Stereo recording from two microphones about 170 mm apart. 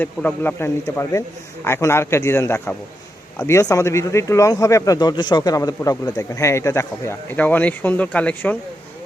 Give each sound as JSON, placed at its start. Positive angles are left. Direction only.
{"t": 0.0, "sound": "speech", "side_deg": 10}